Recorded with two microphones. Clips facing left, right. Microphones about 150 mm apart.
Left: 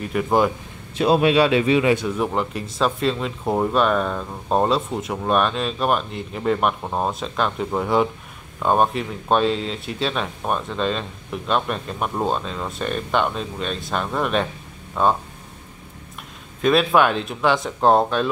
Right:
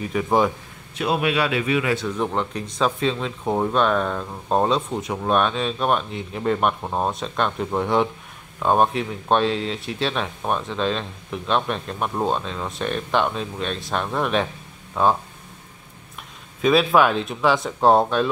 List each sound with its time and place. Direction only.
0.0 s speech: centre (ahead or behind)
0.9 s a man's voice: 30° left (ahead or behind)
2.0 s speech: 10° left (ahead or behind)
16.6 s speech: centre (ahead or behind)